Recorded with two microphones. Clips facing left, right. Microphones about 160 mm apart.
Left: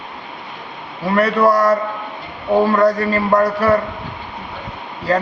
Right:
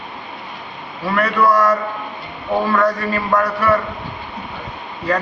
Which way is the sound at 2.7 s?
35° left (ahead or behind).